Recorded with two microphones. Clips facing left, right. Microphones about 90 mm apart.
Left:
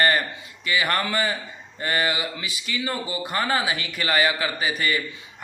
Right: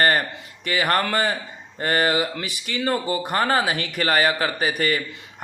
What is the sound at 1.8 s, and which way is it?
A man's voice, 40° right (ahead or behind).